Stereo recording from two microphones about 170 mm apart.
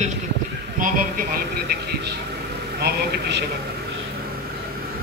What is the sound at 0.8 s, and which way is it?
Speech, 55° right (ahead or behind).